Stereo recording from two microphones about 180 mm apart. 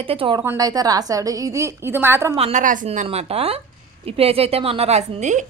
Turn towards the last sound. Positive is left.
turn(degrees=-40)  # may be behind; listen again after turning